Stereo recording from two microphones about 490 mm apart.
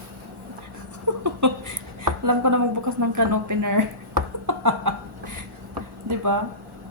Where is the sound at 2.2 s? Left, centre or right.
Right.